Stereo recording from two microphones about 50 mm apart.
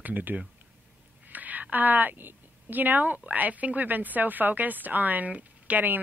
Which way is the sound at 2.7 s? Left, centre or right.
Right.